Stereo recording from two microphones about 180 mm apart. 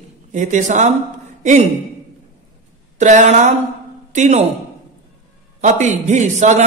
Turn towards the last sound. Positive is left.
turn(degrees=-40)  # may be behind; listen again after turning